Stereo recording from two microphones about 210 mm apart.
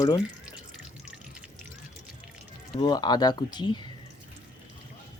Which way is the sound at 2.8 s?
20° left (ahead or behind).